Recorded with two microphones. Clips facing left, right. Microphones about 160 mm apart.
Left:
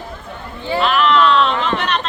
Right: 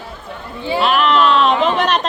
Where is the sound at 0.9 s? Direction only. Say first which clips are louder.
Left 1 dB; 45° right (ahead or behind).